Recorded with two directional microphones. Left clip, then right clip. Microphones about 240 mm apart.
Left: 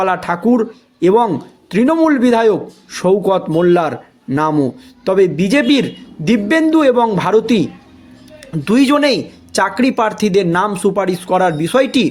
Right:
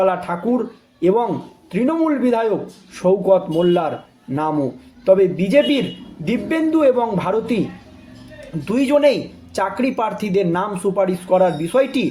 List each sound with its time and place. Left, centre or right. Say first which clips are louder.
0.0 s speech: left 3 dB; left
5.0 s speech: left 1 dB; left
8.6 s speech: left 2 dB; left